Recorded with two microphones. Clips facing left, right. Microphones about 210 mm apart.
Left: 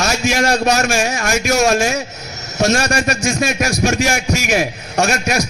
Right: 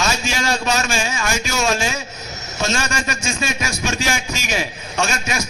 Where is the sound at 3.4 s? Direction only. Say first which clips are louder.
Left 7 dB; 60° left (ahead or behind).